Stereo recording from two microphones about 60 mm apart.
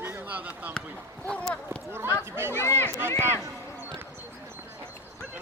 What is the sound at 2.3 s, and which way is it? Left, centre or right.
Speech, right.